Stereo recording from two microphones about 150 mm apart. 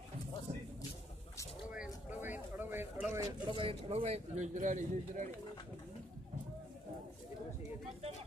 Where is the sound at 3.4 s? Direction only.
40° right (ahead or behind); by 5.3 s 55° right (ahead or behind).